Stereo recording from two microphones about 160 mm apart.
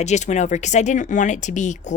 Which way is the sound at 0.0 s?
45° left (ahead or behind).